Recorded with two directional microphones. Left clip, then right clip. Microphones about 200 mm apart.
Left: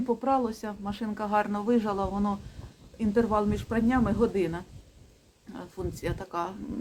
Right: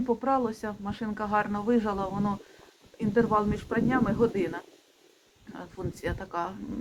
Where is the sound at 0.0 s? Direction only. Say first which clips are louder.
Even; 5° left (ahead or behind).